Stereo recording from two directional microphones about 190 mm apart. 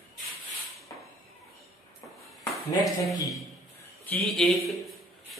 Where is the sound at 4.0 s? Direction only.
10° left (ahead or behind).